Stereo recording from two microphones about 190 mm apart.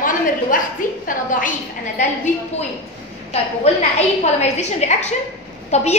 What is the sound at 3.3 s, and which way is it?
A woman's voice, 35° left (ahead or behind).